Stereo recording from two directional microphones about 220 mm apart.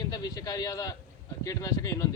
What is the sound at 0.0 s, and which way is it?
A man's voice, 15° left (ahead or behind).